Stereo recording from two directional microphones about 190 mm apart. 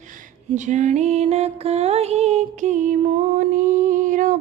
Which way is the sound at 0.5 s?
40° right (ahead or behind).